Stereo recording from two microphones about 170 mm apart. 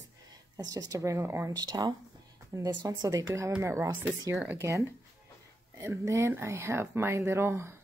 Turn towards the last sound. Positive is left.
turn(degrees=-15)  # may be behind; listen again after turning